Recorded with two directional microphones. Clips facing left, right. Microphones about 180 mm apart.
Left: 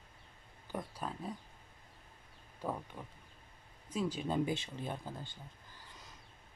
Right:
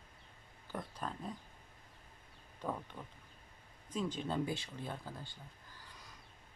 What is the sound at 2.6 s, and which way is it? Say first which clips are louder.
Speech: left 1 dB; 10° left (ahead or behind).